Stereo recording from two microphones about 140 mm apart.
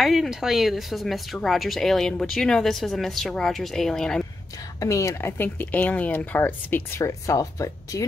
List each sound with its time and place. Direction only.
0.0 s speech: centre (ahead or behind)
4.7 s speech: 25° left (ahead or behind)